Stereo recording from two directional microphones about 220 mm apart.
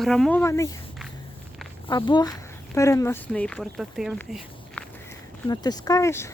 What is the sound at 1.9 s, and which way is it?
Speech, 20° left (ahead or behind).